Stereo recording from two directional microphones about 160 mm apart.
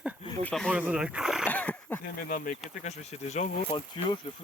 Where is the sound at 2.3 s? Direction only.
55° left (ahead or behind).